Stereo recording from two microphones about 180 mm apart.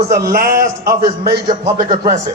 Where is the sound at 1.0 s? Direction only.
25° right (ahead or behind).